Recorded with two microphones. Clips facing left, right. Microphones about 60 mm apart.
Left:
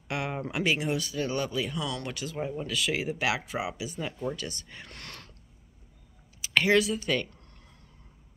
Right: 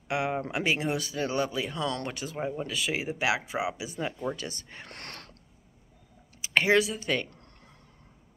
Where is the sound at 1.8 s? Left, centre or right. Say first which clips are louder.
Right 2 dB; right.